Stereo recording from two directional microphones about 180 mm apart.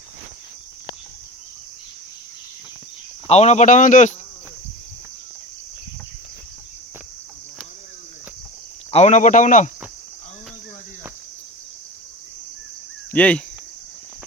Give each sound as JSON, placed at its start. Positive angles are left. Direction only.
{"t": 3.2, "sound": "speech", "side_deg": 35}
{"t": 8.9, "sound": "speech", "side_deg": 40}
{"t": 13.1, "sound": "speech", "side_deg": 5}